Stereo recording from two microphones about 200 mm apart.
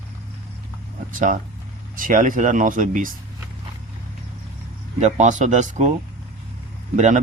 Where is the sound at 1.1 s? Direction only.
40° right (ahead or behind).